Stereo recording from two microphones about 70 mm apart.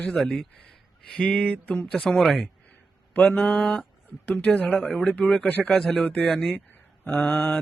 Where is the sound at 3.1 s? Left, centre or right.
Left.